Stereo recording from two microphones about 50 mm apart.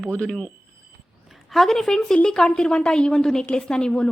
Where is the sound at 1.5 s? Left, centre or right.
Centre.